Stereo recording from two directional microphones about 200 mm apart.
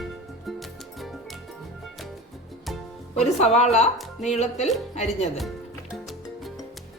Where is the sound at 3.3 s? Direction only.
30° left (ahead or behind).